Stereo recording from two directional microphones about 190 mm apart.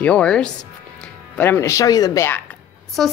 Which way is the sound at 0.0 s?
5° left (ahead or behind).